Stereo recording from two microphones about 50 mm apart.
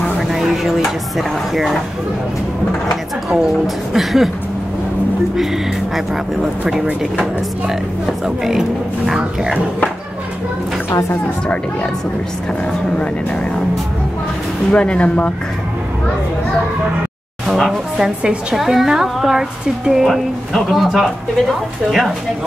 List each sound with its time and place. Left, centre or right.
0.3 s speech: centre
3.3 s speech: centre
8.5 s speech: centre
10.9 s a woman's voice: left
11.4 s speech: left
14.7 s speech: left
17.9 s speech: centre